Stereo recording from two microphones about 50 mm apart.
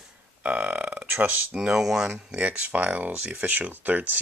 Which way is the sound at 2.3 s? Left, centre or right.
Right.